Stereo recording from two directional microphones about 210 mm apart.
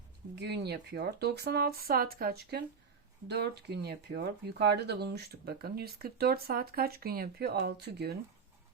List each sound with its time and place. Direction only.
0.3 s speech: 50° right (ahead or behind)